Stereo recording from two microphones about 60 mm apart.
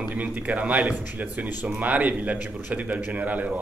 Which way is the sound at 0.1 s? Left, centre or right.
Right.